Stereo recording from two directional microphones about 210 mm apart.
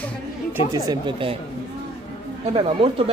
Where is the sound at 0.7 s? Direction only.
20° right (ahead or behind).